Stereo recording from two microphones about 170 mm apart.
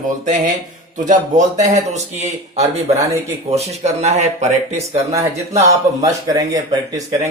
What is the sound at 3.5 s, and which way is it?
Speech, 40° right (ahead or behind).